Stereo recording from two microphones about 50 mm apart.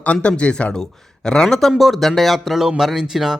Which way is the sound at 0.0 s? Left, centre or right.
Left.